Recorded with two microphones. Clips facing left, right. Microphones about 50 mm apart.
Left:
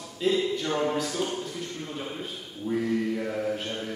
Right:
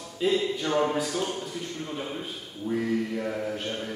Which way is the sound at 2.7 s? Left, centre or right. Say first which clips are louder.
Left 1 dB; centre.